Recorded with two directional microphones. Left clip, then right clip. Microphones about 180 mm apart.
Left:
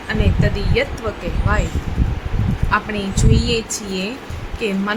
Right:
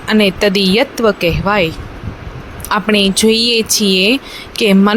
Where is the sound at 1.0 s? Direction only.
45° right (ahead or behind).